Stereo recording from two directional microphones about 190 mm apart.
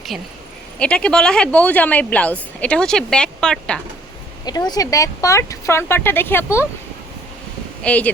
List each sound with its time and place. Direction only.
0.1 s speech: centre (ahead or behind)
4.4 s speech: 20° left (ahead or behind)
7.9 s speech: 5° left (ahead or behind)